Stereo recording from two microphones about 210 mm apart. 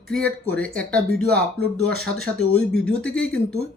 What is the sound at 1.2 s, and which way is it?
Speech, 50° right (ahead or behind).